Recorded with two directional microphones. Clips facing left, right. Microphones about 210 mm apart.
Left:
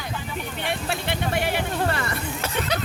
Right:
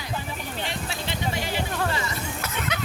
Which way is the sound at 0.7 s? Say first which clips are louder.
Left 8 dB; 60° left (ahead or behind).